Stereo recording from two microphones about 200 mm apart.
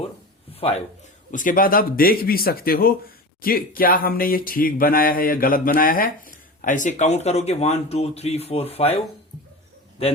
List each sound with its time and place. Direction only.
0.5 s a man's voice: 30° left (ahead or behind)
1.3 s speech: 40° left (ahead or behind)